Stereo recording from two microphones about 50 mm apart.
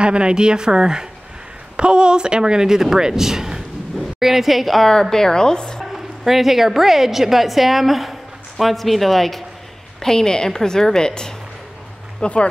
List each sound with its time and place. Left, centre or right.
0.0 s a woman's voice: centre
5.8 s a woman's voice: centre; by 12.4 s left